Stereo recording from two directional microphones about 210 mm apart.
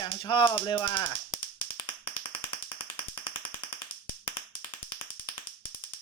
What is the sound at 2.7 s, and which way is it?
Tap, 25° left (ahead or behind).